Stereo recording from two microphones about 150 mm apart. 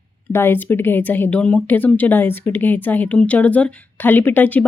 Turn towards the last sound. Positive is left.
turn(degrees=10)  # may be behind; listen again after turning